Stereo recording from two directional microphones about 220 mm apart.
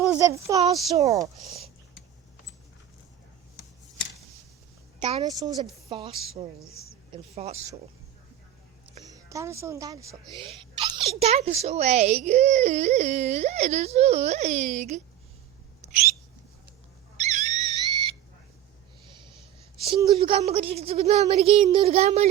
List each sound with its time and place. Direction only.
0.2 s speech: 15° right (ahead or behind)
0.9 s speech: 30° right (ahead or behind)
1.2 s speech: centre (ahead or behind)
4.9 s speech: 25° right (ahead or behind)
9.0 s speech: 15° right (ahead or behind)
10.8 s a sound: 20° right (ahead or behind)
11.2 s speech: 30° right (ahead or behind)
17.2 s a sound: 30° right (ahead or behind)
19.9 s speech: 20° right (ahead or behind)